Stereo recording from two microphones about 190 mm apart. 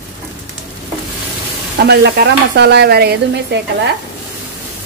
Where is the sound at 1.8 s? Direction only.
60° right (ahead or behind).